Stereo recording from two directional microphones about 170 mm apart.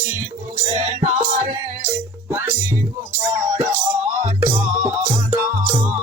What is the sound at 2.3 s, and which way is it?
Music, 15° right (ahead or behind).